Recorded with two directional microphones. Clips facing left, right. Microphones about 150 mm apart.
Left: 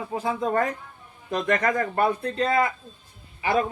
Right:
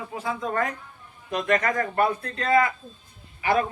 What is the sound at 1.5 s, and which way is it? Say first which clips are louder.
Speech: even; 30° left (ahead or behind).